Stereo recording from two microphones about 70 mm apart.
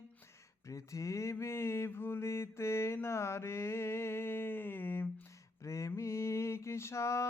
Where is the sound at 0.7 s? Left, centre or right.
Left.